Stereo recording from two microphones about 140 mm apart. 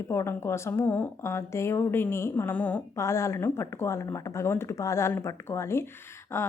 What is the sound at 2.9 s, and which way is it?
Speech, 20° left (ahead or behind).